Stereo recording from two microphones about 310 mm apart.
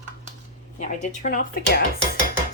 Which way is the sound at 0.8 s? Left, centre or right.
Left.